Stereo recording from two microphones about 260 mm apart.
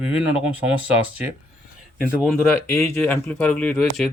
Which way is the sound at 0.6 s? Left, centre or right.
Centre.